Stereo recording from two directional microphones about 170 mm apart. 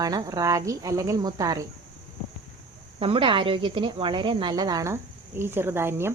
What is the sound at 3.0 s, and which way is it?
Speech, 30° right (ahead or behind).